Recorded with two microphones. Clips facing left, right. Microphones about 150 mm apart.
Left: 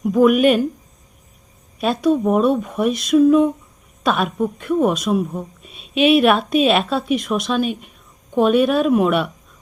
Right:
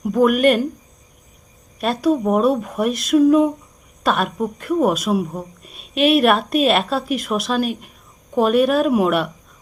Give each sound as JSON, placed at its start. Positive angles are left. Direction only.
{"t": 0.0, "sound": "speech", "side_deg": 0}
{"t": 1.8, "sound": "speech", "side_deg": 0}